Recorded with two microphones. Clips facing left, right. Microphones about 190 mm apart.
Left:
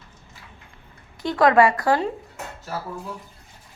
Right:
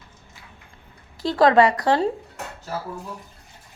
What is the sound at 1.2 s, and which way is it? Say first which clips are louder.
Speech: right 1 dB; 30° right (ahead or behind).